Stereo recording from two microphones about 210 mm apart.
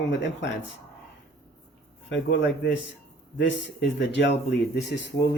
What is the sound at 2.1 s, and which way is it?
Speech, 55° left (ahead or behind).